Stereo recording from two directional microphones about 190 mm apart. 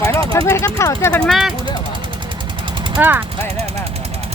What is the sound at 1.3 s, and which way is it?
Speech, centre (ahead or behind).